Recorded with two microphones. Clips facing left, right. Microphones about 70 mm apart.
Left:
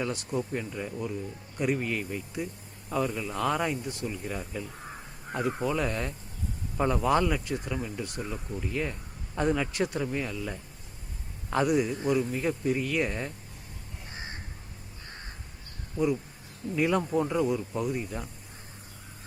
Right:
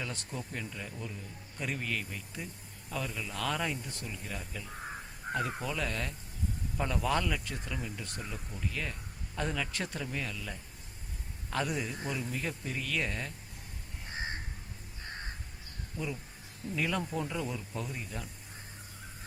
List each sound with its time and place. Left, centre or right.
0.0 s speech: centre
14.1 s crow: right
16.7 s speech: centre